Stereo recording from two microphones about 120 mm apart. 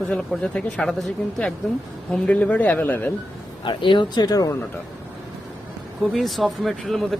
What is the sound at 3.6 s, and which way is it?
Speech, 45° left (ahead or behind).